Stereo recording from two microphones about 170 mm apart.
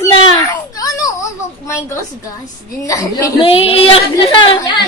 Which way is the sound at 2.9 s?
20° left (ahead or behind).